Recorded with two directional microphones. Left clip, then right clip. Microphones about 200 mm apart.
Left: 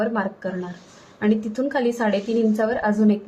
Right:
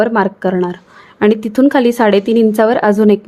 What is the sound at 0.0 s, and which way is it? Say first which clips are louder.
A woman's voice: right 11 dB; 55° right (ahead or behind).